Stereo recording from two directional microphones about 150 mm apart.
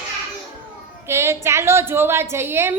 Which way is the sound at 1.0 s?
15° right (ahead or behind).